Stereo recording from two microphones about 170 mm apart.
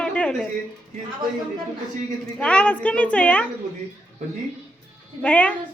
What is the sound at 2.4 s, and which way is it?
Speech, 5° left (ahead or behind).